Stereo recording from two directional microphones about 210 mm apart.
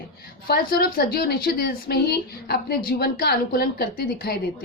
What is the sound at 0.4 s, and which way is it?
A woman's voice, 45° left (ahead or behind).